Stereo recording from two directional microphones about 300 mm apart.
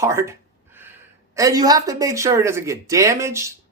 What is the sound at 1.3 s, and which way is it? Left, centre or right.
Speech, centre.